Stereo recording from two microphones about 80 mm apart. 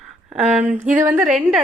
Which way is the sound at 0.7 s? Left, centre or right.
Right.